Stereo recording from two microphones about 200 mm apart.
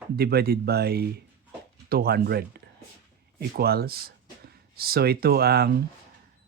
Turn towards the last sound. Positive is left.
turn(degrees=-50)  # may be behind; listen again after turning